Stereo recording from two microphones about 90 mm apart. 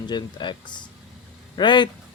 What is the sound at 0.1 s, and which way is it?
A man's voice, 55° left (ahead or behind).